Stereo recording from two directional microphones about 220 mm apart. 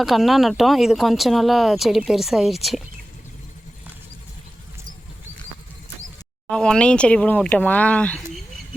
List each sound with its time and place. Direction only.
0.0 s speech: centre (ahead or behind)
6.5 s speech: 5° left (ahead or behind)